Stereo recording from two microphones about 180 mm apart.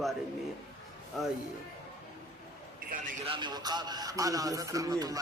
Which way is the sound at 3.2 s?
25° right (ahead or behind).